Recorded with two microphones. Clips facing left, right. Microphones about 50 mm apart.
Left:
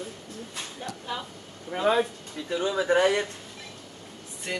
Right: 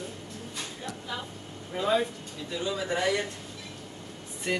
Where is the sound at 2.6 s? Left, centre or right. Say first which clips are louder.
Left 7 dB; left.